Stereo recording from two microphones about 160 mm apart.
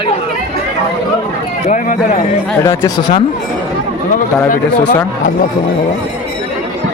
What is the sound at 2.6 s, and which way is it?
Speech, 20° left (ahead or behind).